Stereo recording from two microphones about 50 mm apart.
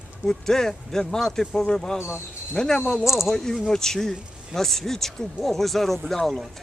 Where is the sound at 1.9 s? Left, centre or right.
Left.